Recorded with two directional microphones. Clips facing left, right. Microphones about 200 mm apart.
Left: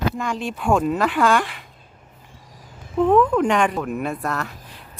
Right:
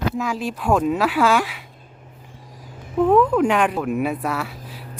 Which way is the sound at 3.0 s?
5° right (ahead or behind).